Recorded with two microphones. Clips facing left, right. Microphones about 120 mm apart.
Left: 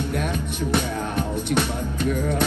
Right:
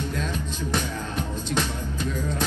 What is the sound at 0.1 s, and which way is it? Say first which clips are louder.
Music: left 4 dB; 65° left (ahead or behind).